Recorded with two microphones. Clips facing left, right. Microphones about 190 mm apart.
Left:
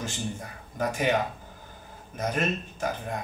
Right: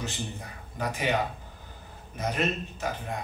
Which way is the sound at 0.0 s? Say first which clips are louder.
Left 2 dB; 45° left (ahead or behind).